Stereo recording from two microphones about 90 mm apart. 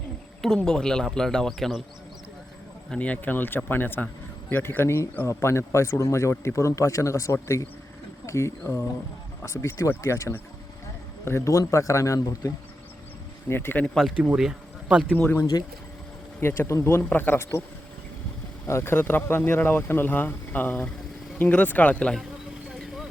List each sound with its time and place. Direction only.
0.4 s a man's voice: 10° left (ahead or behind)
2.9 s a man's voice: 15° left (ahead or behind); by 12.5 s 40° left (ahead or behind)
13.5 s a man's voice: 25° left (ahead or behind)
13.8 s speech: 5° left (ahead or behind)
14.3 s speech: 10° right (ahead or behind)
15.4 s a man's voice: 40° left (ahead or behind)
16.4 s a man's voice: 30° left (ahead or behind)
18.7 s a man's voice: 25° left (ahead or behind)
22.7 s vehicle: centre (ahead or behind)